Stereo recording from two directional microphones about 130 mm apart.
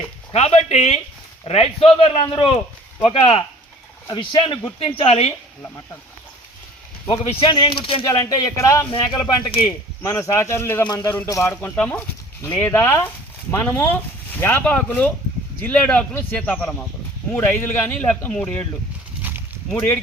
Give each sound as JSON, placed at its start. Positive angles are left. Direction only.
{"t": 0.3, "sound": "speech", "side_deg": 55}
{"t": 7.1, "sound": "speech", "side_deg": 45}
{"t": 8.0, "sound": "speech", "side_deg": 25}
{"t": 9.4, "sound": "speech", "side_deg": 45}
{"t": 10.0, "sound": "speech", "side_deg": 25}
{"t": 19.2, "sound": "a sound", "side_deg": -15}
{"t": 19.7, "sound": "speech", "side_deg": 10}